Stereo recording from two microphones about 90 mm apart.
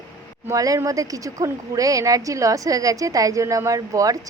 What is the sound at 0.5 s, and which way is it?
A woman's voice, 40° right (ahead or behind).